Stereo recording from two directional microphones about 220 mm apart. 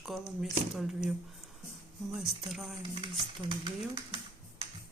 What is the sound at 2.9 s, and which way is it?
Stir, 20° right (ahead or behind).